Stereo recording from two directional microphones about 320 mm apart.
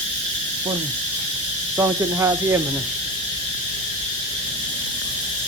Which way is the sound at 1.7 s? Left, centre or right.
Centre.